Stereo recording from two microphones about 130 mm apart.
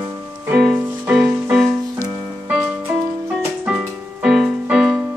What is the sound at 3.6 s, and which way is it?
Music, 5° right (ahead or behind).